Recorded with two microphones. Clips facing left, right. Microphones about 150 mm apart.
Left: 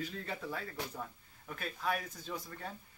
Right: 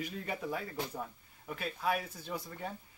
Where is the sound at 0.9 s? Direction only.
10° right (ahead or behind).